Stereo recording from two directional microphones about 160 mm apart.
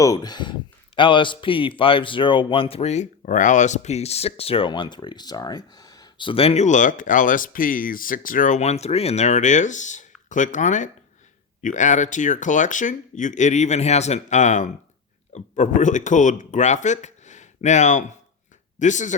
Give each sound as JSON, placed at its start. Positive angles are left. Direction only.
{"t": 0.0, "sound": "speech", "side_deg": 25}